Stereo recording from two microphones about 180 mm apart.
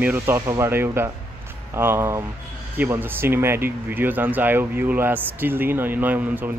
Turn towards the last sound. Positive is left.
turn(degrees=-10)  # may be behind; listen again after turning